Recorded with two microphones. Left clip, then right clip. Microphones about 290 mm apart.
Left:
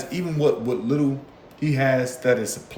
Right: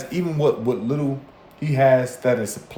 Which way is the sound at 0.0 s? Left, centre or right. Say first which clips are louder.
Right 1 dB; centre.